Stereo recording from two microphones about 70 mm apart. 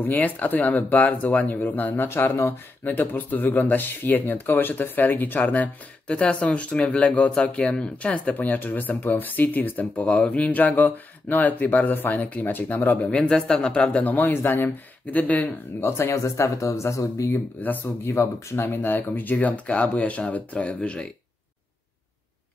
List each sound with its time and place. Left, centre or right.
0.0 s speech: left
14.2 s speech: left
16.0 s speech: left
17.3 s speech: left
18.0 s speech: left; by 21.1 s centre